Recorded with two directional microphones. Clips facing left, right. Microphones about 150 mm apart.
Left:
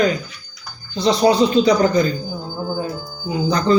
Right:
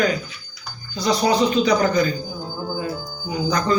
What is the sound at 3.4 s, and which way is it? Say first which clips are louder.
Speech: left 5 dB; 30° left (ahead or behind).